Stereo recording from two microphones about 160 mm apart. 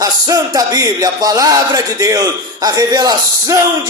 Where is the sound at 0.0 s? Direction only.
25° right (ahead or behind).